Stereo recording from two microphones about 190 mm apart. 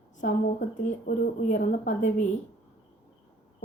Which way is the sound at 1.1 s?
45° left (ahead or behind).